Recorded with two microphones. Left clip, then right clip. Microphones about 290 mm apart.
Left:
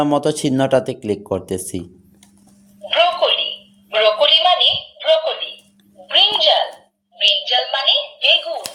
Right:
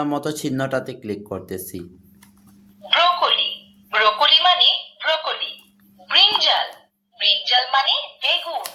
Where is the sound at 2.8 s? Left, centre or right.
Centre.